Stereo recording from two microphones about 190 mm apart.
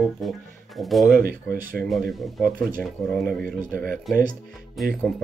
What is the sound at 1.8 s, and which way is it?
Speech, centre (ahead or behind).